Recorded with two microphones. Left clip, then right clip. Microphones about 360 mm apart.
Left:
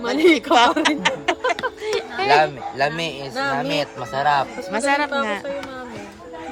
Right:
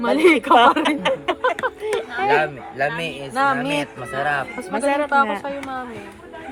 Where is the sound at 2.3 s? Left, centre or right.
Left.